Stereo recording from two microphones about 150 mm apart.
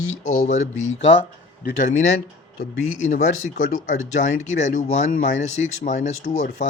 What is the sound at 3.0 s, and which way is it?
A man's voice, 55° left (ahead or behind).